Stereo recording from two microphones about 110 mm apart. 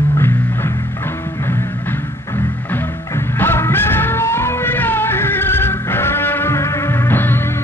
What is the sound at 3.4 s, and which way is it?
Music, 20° left (ahead or behind).